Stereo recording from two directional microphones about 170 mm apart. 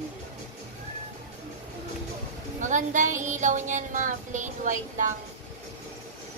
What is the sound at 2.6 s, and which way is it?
Child singing, 45° right (ahead or behind).